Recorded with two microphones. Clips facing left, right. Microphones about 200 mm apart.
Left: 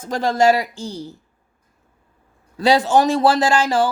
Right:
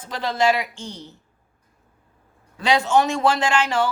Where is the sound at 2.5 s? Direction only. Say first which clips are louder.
Left 4 dB; 35° left (ahead or behind).